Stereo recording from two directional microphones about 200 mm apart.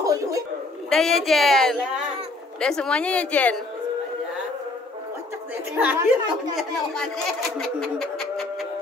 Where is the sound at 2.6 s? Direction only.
5° left (ahead or behind).